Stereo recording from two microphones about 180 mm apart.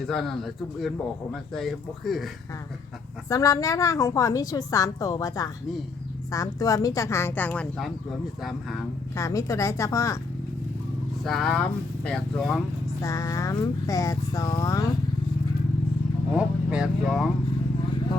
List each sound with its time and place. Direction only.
0.1 s speech: centre (ahead or behind)
3.2 s a woman's voice: 20° left (ahead or behind); by 8.8 s centre (ahead or behind)
9.1 s speech: 15° left (ahead or behind)
11.2 s speech: centre (ahead or behind)
13.0 s a woman's voice: 15° left (ahead or behind)
16.3 s speech: 5° right (ahead or behind)